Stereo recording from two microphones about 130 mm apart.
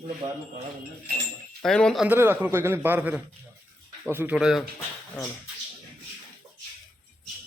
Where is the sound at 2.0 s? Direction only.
15° right (ahead or behind).